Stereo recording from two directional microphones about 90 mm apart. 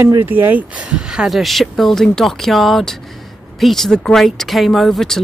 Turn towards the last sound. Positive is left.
turn(degrees=5)  # may be behind; listen again after turning